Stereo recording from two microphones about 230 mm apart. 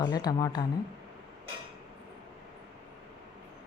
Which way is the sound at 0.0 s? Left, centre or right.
Centre.